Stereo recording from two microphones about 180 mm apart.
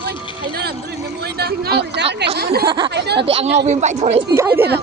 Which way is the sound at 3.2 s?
35° right (ahead or behind).